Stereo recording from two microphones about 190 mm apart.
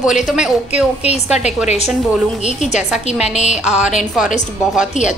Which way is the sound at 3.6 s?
5° right (ahead or behind).